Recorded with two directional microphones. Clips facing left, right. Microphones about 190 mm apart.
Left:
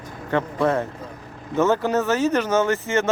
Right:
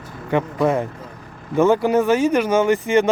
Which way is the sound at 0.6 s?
10° right (ahead or behind).